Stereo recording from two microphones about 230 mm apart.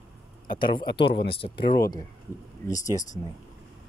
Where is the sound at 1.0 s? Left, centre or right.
Left.